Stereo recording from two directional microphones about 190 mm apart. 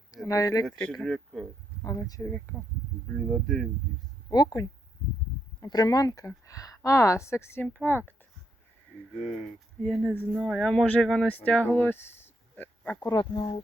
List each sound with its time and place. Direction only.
0.3 s speech: 20° left (ahead or behind)
0.6 s speech: 5° left (ahead or behind)
1.8 s speech: 20° left (ahead or behind); by 3.7 s 5° left (ahead or behind)
4.3 s speech: 20° left (ahead or behind)
9.8 s speech: 5° left (ahead or behind)
12.5 s a sound: 10° left (ahead or behind)
13.0 s speech: 20° left (ahead or behind)